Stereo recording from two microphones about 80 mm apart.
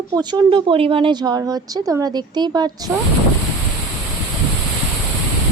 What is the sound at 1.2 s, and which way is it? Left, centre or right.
Speech, right.